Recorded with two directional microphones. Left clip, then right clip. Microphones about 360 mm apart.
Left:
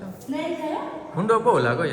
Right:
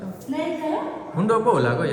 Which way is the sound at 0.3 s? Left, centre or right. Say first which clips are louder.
Right 2 dB; centre.